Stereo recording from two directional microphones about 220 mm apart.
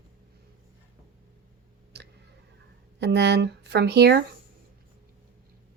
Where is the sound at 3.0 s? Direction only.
50° right (ahead or behind).